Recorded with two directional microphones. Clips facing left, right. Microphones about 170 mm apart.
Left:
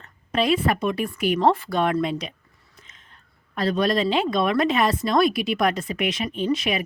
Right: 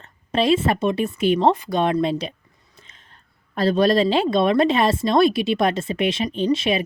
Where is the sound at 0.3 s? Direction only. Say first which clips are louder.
Right 3 dB; 25° right (ahead or behind).